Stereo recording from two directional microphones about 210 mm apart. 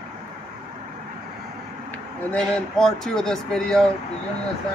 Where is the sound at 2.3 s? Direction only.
5° left (ahead or behind).